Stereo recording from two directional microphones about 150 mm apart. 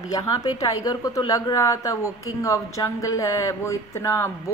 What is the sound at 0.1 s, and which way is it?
Speech, 25° left (ahead or behind).